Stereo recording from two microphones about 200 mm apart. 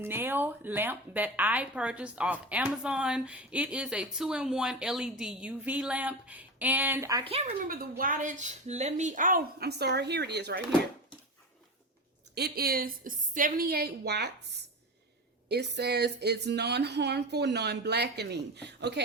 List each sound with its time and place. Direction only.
0.0 s speech: 10° right (ahead or behind)
7.3 s speech: 30° right (ahead or behind)
7.7 s a woman's voice: 45° right (ahead or behind)
12.3 s a woman's voice: 50° right (ahead or behind)